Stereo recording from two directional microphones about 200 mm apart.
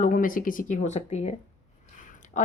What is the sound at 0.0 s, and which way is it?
A woman's voice, 45° left (ahead or behind).